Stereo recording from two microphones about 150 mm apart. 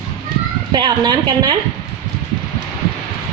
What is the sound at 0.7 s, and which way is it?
Speech, 30° right (ahead or behind).